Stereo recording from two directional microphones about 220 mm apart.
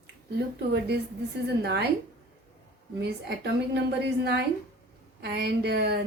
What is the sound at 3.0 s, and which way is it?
Speech, 50° right (ahead or behind).